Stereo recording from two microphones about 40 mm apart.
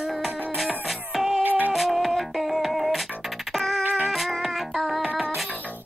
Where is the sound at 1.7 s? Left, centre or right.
Centre.